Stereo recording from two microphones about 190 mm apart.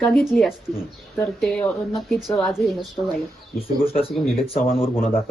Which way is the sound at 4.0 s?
30° left (ahead or behind).